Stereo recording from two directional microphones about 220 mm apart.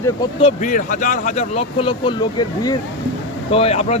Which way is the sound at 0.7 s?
35° left (ahead or behind).